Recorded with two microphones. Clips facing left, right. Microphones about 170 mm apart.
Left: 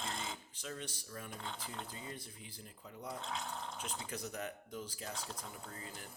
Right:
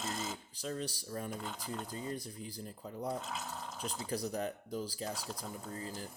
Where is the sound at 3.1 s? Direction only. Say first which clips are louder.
Right 1 dB; 5° right (ahead or behind).